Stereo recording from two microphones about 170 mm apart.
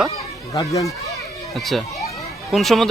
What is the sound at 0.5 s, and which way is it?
Speech, 20° left (ahead or behind).